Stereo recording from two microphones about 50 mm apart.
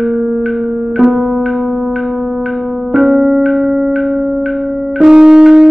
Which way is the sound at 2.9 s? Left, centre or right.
Centre.